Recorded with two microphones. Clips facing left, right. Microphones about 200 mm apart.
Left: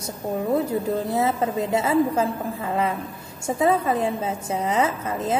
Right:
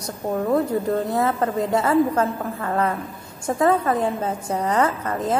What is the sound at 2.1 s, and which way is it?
A woman's voice, 10° left (ahead or behind).